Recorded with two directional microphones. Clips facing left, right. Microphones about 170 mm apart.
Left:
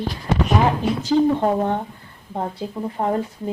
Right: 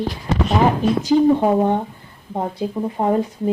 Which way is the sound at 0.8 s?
15° right (ahead or behind).